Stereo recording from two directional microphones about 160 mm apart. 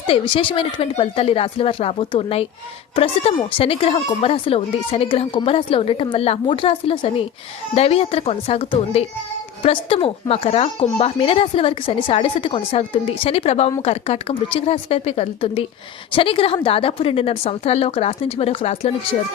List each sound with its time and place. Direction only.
0.1 s speech: 35° left (ahead or behind)